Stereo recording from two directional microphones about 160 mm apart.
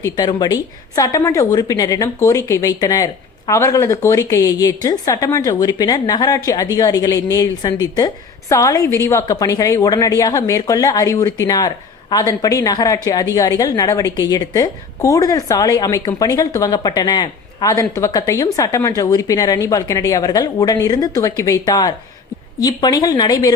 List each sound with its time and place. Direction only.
0.0 s a woman's voice: 25° left (ahead or behind)